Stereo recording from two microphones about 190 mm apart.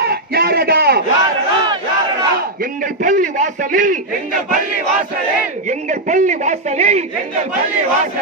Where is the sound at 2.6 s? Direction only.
45° right (ahead or behind).